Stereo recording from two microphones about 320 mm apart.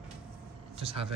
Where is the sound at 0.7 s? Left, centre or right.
Centre.